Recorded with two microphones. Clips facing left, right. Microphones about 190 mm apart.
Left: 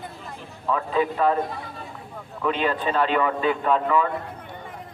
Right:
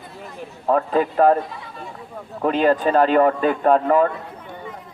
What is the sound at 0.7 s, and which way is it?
Speech, 50° right (ahead or behind).